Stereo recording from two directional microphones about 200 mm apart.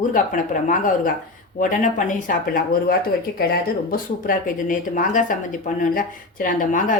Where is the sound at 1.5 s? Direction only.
40° left (ahead or behind).